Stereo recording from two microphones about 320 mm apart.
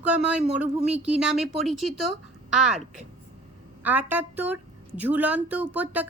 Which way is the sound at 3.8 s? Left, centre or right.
Centre.